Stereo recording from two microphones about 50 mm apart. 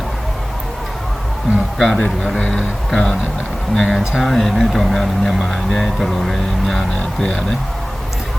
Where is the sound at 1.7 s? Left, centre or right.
Centre.